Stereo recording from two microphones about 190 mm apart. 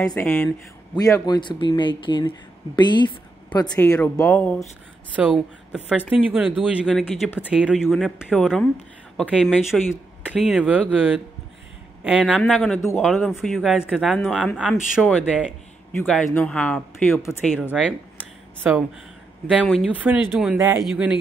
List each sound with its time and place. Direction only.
0.0 s speech: 5° left (ahead or behind)
0.9 s speech: 20° left (ahead or behind)
3.9 s speech: 15° left (ahead or behind)
5.1 s speech: 5° right (ahead or behind); by 17.4 s 15° left (ahead or behind)
17.8 s speech: centre (ahead or behind)
19.6 s speech: 5° left (ahead or behind)
19.9 s speech: 10° right (ahead or behind)